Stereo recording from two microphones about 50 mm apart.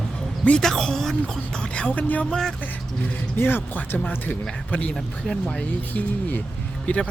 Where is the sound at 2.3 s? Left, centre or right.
Centre.